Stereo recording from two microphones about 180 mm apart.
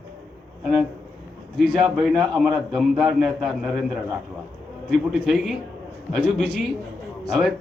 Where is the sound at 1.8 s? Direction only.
Centre (ahead or behind).